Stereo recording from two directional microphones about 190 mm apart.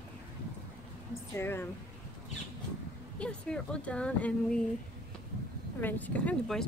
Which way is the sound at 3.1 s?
5° left (ahead or behind).